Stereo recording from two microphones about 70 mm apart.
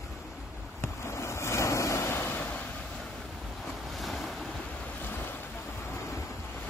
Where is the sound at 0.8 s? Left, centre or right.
Left.